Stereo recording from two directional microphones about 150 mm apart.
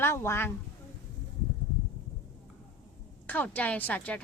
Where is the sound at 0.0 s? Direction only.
15° left (ahead or behind).